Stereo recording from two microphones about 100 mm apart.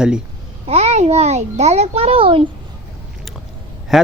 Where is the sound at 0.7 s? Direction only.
90° right; by 2.4 s 70° right (ahead or behind).